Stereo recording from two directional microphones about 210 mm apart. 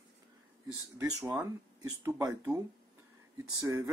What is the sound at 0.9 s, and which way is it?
Speech, 10° right (ahead or behind).